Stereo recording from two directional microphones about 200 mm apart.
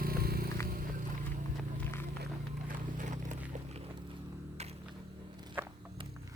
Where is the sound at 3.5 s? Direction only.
35° right (ahead or behind).